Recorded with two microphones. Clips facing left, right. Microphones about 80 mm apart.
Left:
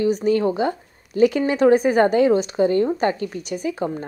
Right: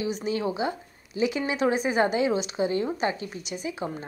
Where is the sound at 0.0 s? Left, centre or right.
Left.